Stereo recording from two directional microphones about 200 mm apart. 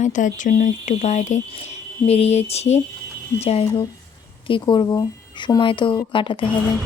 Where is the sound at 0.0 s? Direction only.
40° left (ahead or behind).